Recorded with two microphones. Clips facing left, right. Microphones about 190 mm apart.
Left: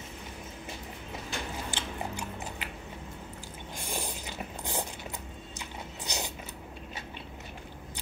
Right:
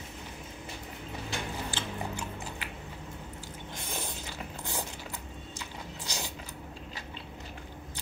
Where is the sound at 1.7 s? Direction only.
15° left (ahead or behind).